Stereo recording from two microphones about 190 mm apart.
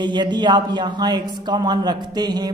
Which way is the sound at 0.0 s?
25° right (ahead or behind).